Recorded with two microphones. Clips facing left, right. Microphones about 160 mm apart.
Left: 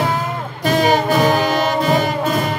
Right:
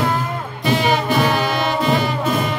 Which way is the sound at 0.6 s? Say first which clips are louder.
Left 3 dB; 45° left (ahead or behind).